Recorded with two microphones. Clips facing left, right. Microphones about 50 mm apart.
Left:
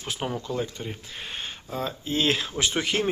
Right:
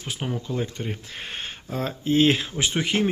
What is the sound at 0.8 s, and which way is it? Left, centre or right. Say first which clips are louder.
Speech: right 3 dB; right.